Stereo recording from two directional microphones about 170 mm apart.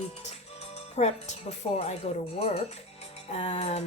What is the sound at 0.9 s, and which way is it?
Speech, 40° left (ahead or behind).